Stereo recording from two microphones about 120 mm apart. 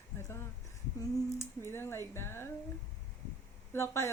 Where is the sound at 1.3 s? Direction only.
20° left (ahead or behind).